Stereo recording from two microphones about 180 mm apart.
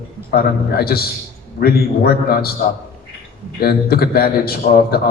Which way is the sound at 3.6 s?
60° left (ahead or behind).